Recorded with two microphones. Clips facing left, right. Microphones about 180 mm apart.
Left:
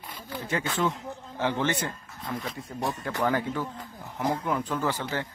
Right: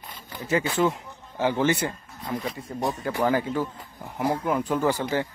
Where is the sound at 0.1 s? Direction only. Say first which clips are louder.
Right 5 dB; 10° right (ahead or behind).